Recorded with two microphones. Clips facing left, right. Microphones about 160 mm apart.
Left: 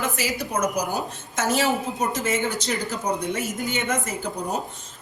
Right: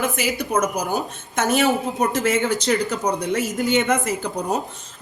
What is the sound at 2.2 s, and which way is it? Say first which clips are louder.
A woman's voice: right 5 dB; 80° right.